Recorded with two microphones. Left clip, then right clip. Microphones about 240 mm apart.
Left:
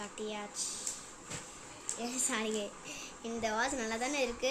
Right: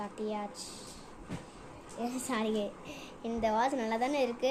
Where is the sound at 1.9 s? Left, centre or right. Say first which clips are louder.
Right 2 dB; centre.